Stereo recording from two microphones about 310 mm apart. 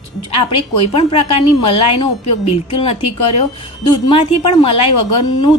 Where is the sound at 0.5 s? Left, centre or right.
Centre.